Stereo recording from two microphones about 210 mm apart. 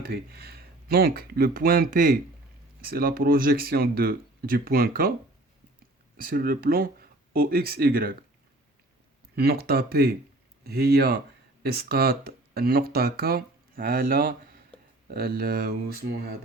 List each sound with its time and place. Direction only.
0.1 s speech: 45° right (ahead or behind)
6.1 s speech: 45° right (ahead or behind)
9.3 s speech: 50° right (ahead or behind)